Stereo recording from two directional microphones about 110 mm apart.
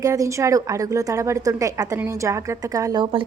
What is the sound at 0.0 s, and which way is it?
A woman's voice, 30° right (ahead or behind).